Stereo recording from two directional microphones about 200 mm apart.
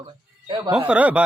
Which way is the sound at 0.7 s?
5° right (ahead or behind).